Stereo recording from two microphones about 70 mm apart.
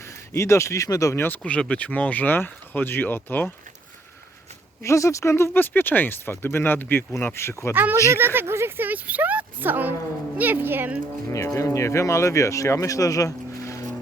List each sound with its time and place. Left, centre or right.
0.3 s speech: left
1.1 s speech: left
1.4 s speech: centre
4.8 s speech: left
7.7 s speech: right
7.9 s speech: right
8.2 s speech: right
11.4 s speech: left